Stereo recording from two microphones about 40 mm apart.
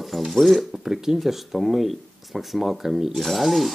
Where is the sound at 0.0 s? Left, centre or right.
Centre.